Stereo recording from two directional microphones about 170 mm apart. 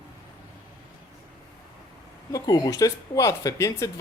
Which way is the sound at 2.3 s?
20° left (ahead or behind).